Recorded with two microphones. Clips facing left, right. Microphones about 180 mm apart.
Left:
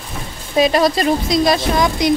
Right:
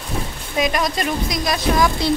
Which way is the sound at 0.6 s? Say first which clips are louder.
Left 7 dB; 30° left (ahead or behind).